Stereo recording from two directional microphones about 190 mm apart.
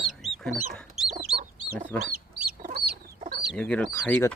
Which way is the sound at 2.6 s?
55° right (ahead or behind).